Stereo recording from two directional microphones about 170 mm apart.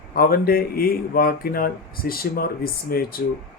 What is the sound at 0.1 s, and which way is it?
Speech, 60° left (ahead or behind).